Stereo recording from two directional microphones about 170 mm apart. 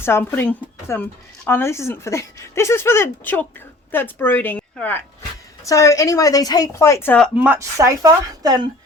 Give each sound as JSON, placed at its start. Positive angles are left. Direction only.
{"t": 0.0, "sound": "a woman's voice", "side_deg": 15}
{"t": 7.3, "sound": "speech", "side_deg": -10}